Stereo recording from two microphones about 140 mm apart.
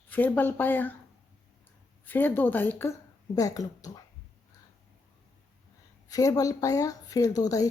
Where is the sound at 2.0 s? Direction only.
15° left (ahead or behind).